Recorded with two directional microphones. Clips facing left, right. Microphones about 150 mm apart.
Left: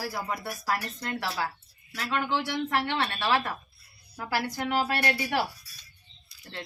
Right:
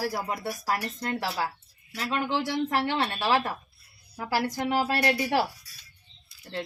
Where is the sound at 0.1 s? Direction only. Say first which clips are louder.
Right 2 dB; 35° right (ahead or behind).